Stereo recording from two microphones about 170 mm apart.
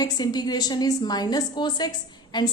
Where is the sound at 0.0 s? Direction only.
25° left (ahead or behind).